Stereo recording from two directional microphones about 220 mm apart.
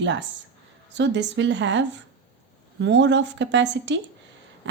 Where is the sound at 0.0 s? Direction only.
55° right (ahead or behind).